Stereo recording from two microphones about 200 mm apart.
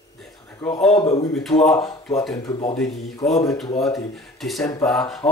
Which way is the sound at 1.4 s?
Centre (ahead or behind).